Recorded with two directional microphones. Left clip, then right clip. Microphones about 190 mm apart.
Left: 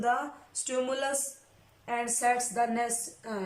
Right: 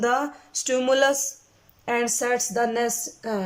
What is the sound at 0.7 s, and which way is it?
A woman's voice, 45° right (ahead or behind).